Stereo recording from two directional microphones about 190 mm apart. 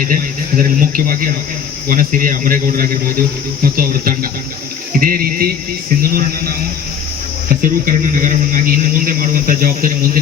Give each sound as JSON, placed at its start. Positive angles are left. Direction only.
{"t": 0.1, "sound": "a man's voice", "side_deg": -45}
{"t": 7.6, "sound": "a man's voice", "side_deg": -45}